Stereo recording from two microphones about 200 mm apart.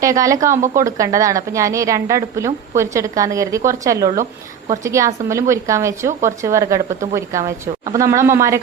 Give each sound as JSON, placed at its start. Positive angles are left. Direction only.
{"t": 0.0, "sound": "a woman's voice", "side_deg": -15}